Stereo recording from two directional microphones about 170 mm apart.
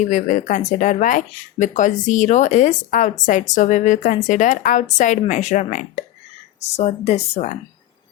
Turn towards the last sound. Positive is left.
turn(degrees=40)  # may be behind; listen again after turning